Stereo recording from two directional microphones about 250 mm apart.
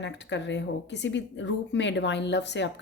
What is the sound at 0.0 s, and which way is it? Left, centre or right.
A woman's voice, left.